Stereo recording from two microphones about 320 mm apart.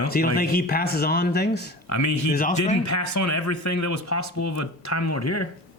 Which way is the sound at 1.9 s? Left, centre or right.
Left.